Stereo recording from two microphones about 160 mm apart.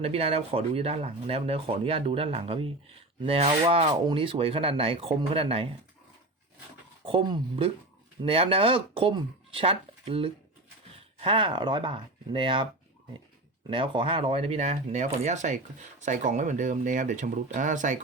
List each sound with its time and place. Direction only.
0.0 s speech: 40° right (ahead or behind)
7.0 s speech: 30° right (ahead or behind)
13.7 s speech: 35° right (ahead or behind); by 18.0 s 50° right (ahead or behind)